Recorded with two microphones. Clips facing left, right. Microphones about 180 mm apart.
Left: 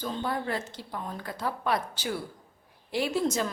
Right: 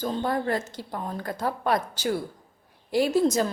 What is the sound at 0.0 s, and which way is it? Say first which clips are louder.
A woman's voice: right 5 dB; 45° right (ahead or behind).